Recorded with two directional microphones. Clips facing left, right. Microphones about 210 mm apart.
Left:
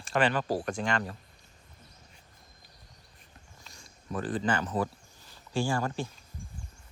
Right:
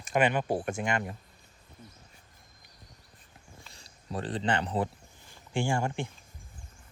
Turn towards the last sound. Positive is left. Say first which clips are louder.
# even
turn(degrees=-25)  # may be behind; listen again after turning